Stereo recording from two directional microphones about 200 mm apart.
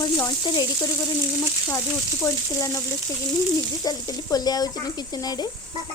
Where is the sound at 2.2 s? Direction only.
15° left (ahead or behind).